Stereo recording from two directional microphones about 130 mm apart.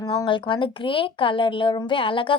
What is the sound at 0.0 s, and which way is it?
A woman's voice, 35° left (ahead or behind).